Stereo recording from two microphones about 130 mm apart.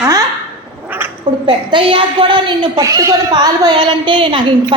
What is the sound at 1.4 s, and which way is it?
A woman's voice, 40° right (ahead or behind).